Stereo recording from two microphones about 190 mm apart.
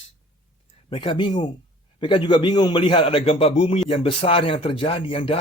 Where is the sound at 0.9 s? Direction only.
25° left (ahead or behind).